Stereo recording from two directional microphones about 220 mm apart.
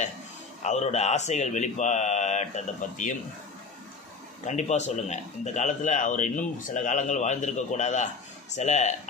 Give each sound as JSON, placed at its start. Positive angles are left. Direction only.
{"t": 0.6, "sound": "a man's voice", "side_deg": 30}
{"t": 4.5, "sound": "a man's voice", "side_deg": 30}